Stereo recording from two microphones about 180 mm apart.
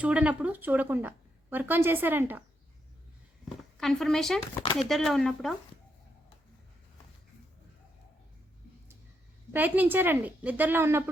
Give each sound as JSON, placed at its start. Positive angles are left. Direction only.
{"t": 0.0, "sound": "a woman's voice", "side_deg": -5}
{"t": 3.8, "sound": "speech", "side_deg": 0}
{"t": 4.6, "sound": "speech", "side_deg": 30}
{"t": 4.9, "sound": "speech", "side_deg": 0}
{"t": 9.5, "sound": "a woman's voice", "side_deg": -10}